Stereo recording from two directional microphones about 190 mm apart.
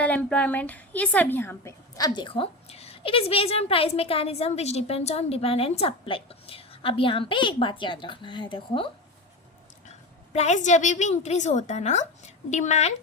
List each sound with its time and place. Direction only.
0.0 s a woman's voice: 5° left (ahead or behind); by 12.9 s 35° left (ahead or behind)